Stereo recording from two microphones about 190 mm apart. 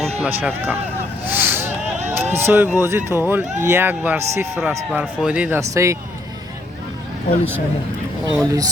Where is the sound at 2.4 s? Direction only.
10° right (ahead or behind).